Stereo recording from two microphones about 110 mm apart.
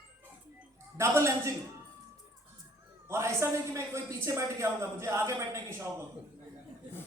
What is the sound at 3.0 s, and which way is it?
A man's voice, 25° right (ahead or behind).